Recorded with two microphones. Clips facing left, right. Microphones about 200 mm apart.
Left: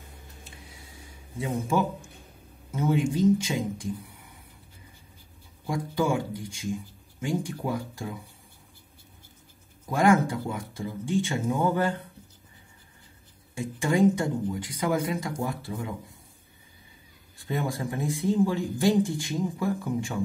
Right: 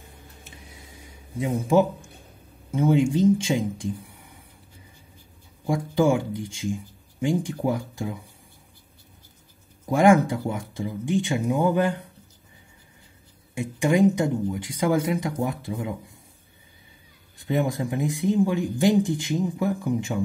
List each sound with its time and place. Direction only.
2.7 s speech: 25° right (ahead or behind)
5.7 s speech: 25° right (ahead or behind)
9.8 s speech: 20° right (ahead or behind)
13.6 s speech: 20° right (ahead or behind)
17.4 s speech: 20° right (ahead or behind)